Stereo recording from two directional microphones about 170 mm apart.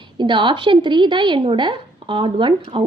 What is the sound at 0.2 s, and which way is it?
A woman's voice, 30° right (ahead or behind).